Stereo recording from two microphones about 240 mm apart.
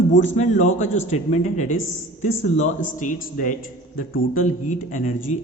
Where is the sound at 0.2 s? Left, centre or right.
Left.